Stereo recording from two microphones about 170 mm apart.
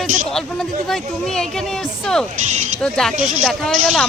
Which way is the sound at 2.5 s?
45° right (ahead or behind).